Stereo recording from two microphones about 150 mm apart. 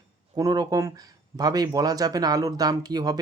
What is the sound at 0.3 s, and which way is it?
Speech, 25° right (ahead or behind).